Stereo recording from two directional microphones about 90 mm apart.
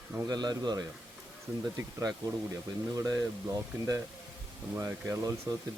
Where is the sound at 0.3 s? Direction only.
50° right (ahead or behind).